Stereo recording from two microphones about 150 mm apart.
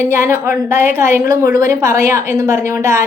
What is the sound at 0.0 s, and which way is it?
A woman's voice, 20° right (ahead or behind).